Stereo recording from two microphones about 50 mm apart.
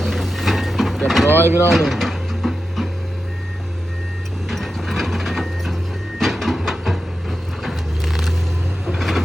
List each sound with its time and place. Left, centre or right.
0.0 s vehicle: centre
1.3 s speech: right
1.7 s printer: centre
4.4 s printer: centre
6.1 s vehicle: centre